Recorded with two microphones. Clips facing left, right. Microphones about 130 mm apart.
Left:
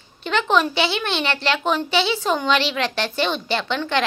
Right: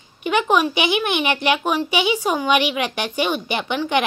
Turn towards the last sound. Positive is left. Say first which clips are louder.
# right 1 dB
turn(degrees=-15)  # may be behind; listen again after turning